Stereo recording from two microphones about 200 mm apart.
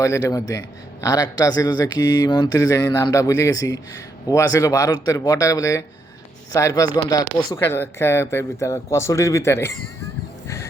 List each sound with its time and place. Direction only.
0.0 s speech: 15° left (ahead or behind)